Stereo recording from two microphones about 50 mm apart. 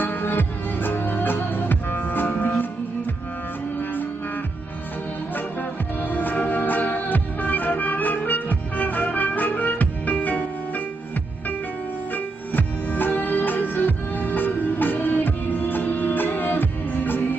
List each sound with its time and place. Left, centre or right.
0.0 s music: left
5.3 s music: left
12.5 s music: left